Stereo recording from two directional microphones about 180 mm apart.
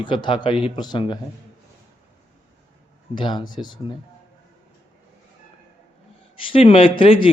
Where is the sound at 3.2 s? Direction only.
25° left (ahead or behind).